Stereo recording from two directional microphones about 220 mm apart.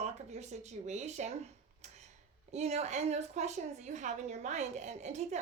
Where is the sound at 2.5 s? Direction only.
30° right (ahead or behind).